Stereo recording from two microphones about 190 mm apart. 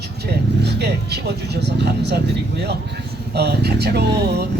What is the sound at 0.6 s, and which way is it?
Speech, 60° right (ahead or behind).